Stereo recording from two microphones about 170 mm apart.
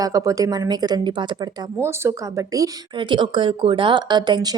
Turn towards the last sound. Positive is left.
turn(degrees=-25)  # may be behind; listen again after turning